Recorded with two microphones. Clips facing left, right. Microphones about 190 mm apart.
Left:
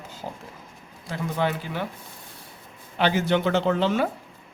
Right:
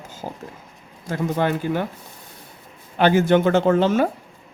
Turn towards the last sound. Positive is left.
turn(degrees=-45)  # may be behind; listen again after turning